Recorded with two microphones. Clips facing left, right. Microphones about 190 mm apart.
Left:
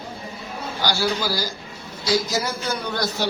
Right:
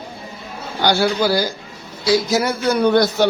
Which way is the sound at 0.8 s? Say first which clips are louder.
Right 7 dB; 60° right (ahead or behind).